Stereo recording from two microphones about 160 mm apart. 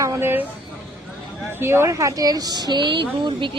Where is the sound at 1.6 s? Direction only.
15° right (ahead or behind).